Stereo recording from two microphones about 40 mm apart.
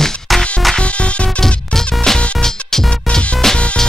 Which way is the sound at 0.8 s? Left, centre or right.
Left.